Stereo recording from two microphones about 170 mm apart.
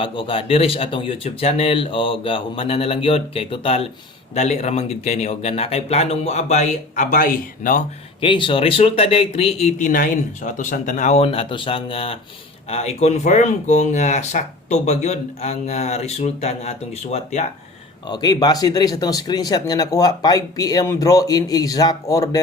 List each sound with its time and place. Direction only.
0.0 s speech: 30° left (ahead or behind); by 7.8 s 50° left (ahead or behind)
8.2 s speech: 30° left (ahead or behind)
18.1 s speech: 25° left (ahead or behind)